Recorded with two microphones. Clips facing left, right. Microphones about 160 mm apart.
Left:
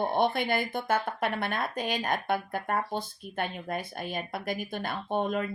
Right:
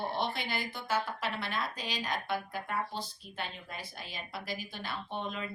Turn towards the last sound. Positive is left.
turn(degrees=50)  # may be behind; listen again after turning